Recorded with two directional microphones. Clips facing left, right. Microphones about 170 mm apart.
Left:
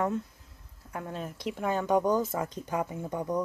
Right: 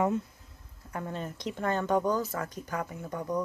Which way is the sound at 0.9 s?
5° left (ahead or behind).